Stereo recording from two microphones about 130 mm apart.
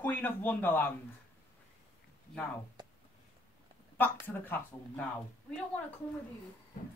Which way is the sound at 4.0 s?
15° left (ahead or behind).